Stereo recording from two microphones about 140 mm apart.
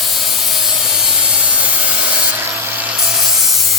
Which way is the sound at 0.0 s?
Centre (ahead or behind).